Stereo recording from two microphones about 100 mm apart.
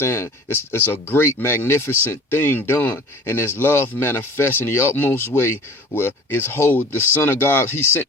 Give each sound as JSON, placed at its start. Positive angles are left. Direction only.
{"t": 0.0, "sound": "speech", "side_deg": 25}